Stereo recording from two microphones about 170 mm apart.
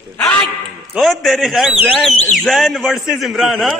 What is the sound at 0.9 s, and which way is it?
A man's voice, centre (ahead or behind).